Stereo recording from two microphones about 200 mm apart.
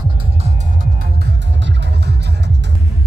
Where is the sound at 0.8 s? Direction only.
50° right (ahead or behind).